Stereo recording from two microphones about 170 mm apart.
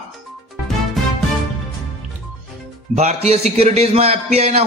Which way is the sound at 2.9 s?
40° right (ahead or behind).